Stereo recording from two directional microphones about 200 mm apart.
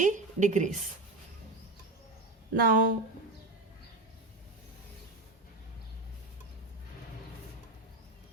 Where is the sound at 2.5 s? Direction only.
45° right (ahead or behind).